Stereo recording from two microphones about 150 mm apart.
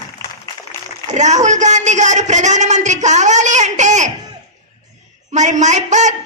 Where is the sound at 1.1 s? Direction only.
50° right (ahead or behind).